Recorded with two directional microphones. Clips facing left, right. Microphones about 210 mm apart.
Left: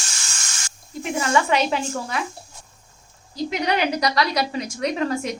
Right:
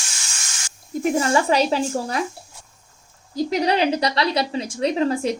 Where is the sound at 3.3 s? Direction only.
35° right (ahead or behind).